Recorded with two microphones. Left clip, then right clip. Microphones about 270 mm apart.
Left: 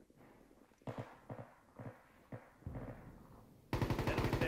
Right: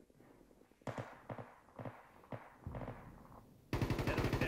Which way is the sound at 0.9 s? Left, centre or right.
Right.